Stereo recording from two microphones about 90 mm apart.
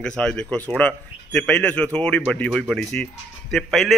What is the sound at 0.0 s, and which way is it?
A man's voice, 10° left (ahead or behind).